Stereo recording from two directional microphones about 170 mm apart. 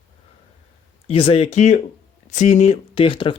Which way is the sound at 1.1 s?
35° left (ahead or behind).